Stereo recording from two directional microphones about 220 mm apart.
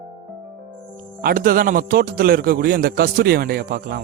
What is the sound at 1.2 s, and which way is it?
Speech, 40° right (ahead or behind).